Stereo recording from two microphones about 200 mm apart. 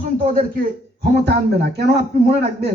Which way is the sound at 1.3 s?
55° right (ahead or behind).